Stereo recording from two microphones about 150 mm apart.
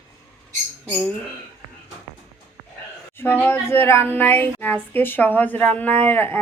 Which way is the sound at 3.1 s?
15° left (ahead or behind).